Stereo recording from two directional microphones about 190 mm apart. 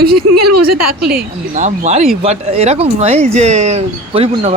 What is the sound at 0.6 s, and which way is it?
Speech, 55° right (ahead or behind).